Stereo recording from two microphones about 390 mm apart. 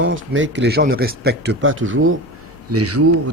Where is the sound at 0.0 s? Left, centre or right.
Right.